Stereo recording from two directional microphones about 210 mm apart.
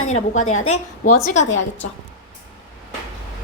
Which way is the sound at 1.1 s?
35° left (ahead or behind).